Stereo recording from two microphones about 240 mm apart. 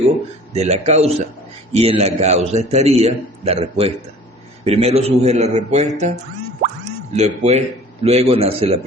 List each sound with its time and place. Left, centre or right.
0.5 s a man's voice: right
7.1 s a man's voice: right